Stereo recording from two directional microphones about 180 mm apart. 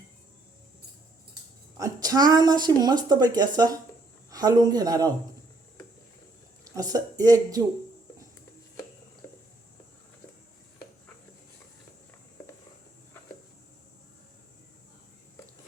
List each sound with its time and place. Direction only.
1.8 s a woman's voice: 20° right (ahead or behind)
6.7 s a woman's voice: 20° right (ahead or behind)